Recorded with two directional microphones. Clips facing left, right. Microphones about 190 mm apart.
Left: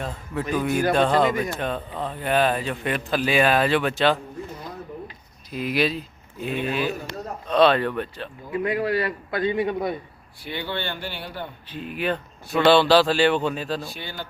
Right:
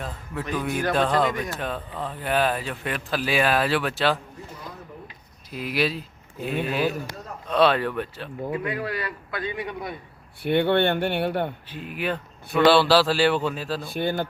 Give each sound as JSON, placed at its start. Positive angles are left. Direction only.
{"t": 0.0, "sound": "speech", "side_deg": 0}
{"t": 5.5, "sound": "speech", "side_deg": -5}
{"t": 8.6, "sound": "a man's voice", "side_deg": 30}
{"t": 10.4, "sound": "speech", "side_deg": -60}
{"t": 11.7, "sound": "speech", "side_deg": -10}
{"t": 13.9, "sound": "speech", "side_deg": -55}